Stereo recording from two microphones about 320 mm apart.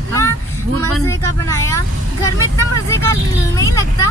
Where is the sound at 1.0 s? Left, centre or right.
Centre.